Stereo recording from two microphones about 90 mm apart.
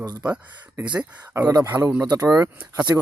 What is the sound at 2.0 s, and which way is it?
Speech, 45° right (ahead or behind).